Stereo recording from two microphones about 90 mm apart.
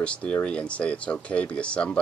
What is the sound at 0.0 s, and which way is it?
Speech, 15° left (ahead or behind).